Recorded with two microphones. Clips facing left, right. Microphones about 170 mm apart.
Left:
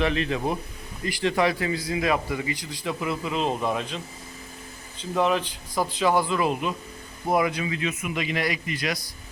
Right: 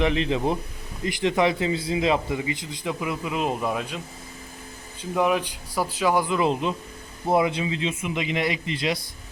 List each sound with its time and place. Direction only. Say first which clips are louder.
0.0 s a man's voice: right 2 dB; 20° right (ahead or behind)